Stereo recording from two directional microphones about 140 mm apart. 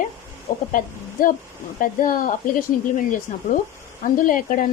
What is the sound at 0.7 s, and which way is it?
Speech, 75° left (ahead or behind).